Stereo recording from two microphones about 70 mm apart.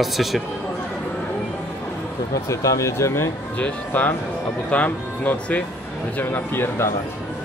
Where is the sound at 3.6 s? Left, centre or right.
Left.